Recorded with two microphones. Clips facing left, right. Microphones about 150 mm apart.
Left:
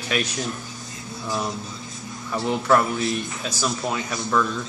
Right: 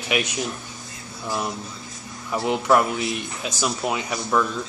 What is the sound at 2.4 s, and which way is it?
Speech, 15° right (ahead or behind).